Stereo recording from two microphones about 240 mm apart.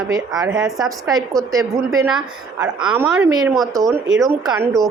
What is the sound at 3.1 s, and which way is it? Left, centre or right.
Speech, centre.